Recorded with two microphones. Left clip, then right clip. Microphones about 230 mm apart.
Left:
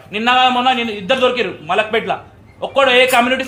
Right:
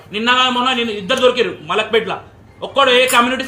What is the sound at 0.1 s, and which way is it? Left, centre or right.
A man's voice, centre.